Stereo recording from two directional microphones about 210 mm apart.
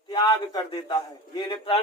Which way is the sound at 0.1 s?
20° left (ahead or behind).